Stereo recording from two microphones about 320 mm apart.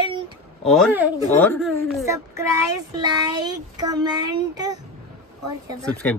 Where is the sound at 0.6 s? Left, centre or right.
Centre.